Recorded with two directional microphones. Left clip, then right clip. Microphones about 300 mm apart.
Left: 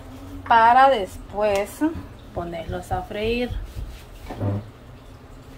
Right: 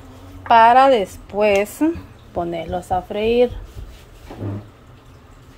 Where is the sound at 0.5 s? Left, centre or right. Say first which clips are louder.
Right 4 dB; right.